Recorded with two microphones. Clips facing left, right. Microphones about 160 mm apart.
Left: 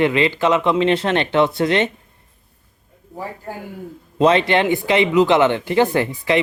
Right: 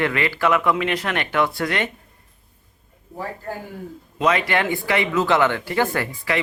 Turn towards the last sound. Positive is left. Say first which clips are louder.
# left 6 dB
turn(degrees=20)  # may be behind; listen again after turning